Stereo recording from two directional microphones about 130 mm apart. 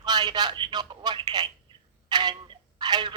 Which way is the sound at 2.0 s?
35° right (ahead or behind).